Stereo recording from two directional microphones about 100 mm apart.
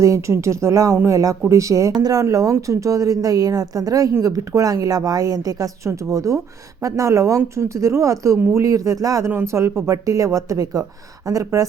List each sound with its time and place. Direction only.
0.0 s speech: 30° right (ahead or behind)